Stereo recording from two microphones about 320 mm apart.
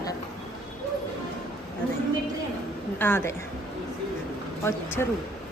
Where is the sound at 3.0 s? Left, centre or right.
Centre.